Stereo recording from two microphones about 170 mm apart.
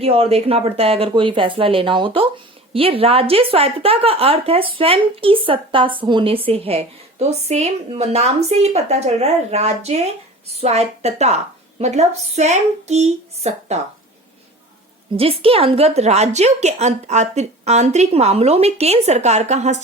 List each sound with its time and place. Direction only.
0.0 s speech: 35° right (ahead or behind)
15.1 s speech: 35° right (ahead or behind)